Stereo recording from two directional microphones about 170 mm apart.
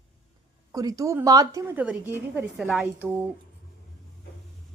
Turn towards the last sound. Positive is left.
turn(degrees=-10)  # may be behind; listen again after turning